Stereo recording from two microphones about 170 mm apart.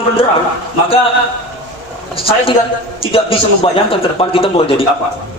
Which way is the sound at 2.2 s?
35° left (ahead or behind).